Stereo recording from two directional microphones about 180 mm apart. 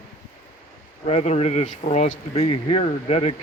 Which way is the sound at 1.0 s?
35° left (ahead or behind).